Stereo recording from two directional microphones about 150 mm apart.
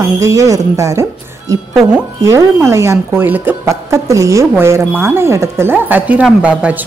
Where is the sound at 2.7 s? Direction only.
20° right (ahead or behind).